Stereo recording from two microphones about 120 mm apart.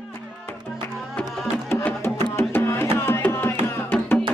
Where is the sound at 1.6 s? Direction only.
20° left (ahead or behind).